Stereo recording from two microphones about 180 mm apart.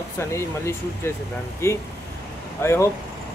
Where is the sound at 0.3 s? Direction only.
15° left (ahead or behind).